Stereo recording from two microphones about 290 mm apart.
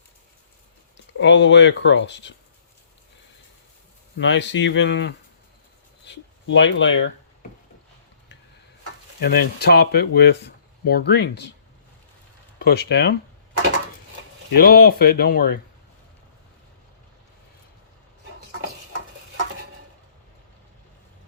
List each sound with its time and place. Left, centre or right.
1.2 s speech: left
4.2 s speech: left
9.2 s speech: left
12.5 s speech: left
14.5 s speech: left